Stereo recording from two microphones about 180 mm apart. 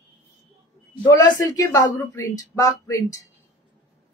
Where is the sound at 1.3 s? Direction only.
20° left (ahead or behind).